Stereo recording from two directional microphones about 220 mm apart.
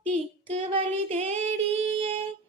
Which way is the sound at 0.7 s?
25° right (ahead or behind).